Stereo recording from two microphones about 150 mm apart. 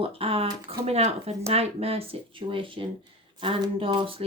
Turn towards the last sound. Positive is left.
turn(degrees=-35)  # may be behind; listen again after turning